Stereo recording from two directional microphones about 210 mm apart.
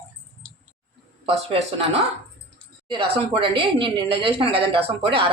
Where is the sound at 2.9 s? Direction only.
25° right (ahead or behind).